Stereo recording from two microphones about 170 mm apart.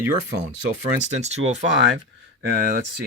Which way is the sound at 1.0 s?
40° right (ahead or behind).